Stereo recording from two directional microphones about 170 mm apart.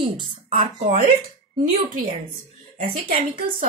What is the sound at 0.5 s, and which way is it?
Speech, 40° right (ahead or behind).